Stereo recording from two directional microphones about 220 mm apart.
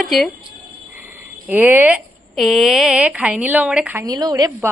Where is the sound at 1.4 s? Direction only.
10° right (ahead or behind).